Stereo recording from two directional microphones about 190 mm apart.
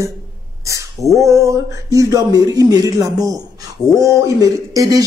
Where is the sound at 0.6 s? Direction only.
15° right (ahead or behind).